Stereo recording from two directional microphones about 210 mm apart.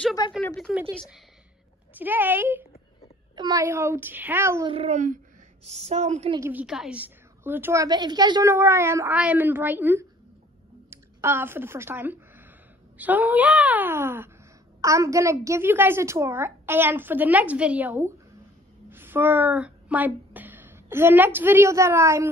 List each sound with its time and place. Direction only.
0.2 s speech: 20° left (ahead or behind)
0.9 s a woman's voice: centre (ahead or behind)
4.6 s a woman's voice: 30° right (ahead or behind)
6.3 s a woman's voice: 10° right (ahead or behind)